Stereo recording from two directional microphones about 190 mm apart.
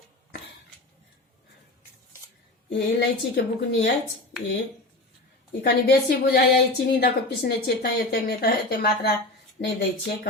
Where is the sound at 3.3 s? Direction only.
65° left (ahead or behind).